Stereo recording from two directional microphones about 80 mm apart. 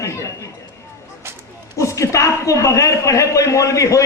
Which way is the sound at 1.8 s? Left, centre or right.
Left.